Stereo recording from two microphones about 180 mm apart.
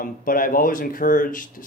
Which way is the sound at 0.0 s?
50° left (ahead or behind).